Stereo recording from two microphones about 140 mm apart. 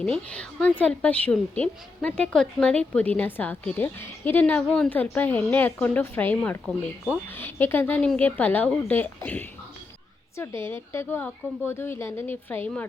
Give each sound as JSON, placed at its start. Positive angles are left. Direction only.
{"t": 0.0, "sound": "a woman's voice", "side_deg": 5}